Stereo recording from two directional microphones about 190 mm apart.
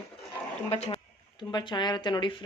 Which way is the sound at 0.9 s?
25° left (ahead or behind).